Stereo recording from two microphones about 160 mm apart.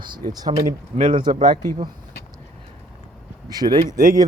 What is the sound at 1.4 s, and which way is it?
Speech, 25° right (ahead or behind).